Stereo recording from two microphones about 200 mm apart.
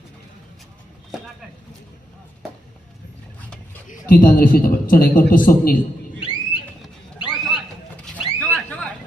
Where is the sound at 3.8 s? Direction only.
40° left (ahead or behind).